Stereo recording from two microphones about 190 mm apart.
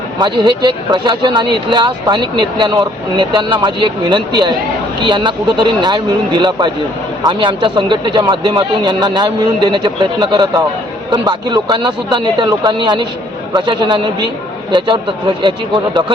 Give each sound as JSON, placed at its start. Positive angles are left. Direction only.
{"t": 0.2, "sound": "speech", "side_deg": -25}